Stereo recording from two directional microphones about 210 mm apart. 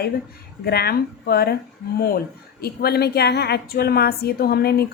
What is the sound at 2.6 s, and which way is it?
A woman's voice, 50° left (ahead or behind).